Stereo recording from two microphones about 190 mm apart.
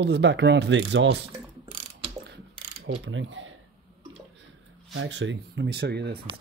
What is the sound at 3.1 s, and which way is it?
Speech, 80° right.